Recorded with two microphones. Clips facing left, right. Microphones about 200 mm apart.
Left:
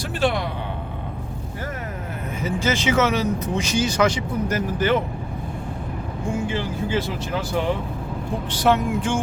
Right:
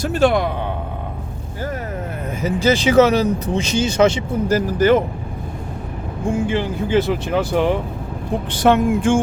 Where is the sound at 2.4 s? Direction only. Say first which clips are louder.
Right 6 dB; 35° right (ahead or behind).